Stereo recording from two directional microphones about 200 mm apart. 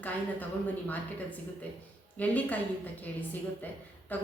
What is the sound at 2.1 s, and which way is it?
A woman's voice, 10° left (ahead or behind).